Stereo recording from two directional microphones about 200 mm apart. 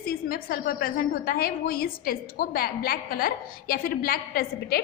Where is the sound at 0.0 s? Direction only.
45° left (ahead or behind).